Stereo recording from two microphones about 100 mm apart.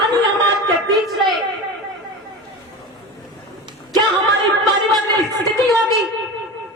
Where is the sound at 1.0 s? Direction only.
Centre (ahead or behind).